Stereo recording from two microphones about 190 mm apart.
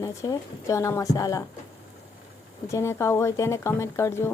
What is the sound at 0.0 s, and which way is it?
Speech, 15° left (ahead or behind).